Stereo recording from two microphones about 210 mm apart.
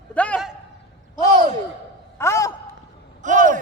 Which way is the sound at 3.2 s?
35° right (ahead or behind).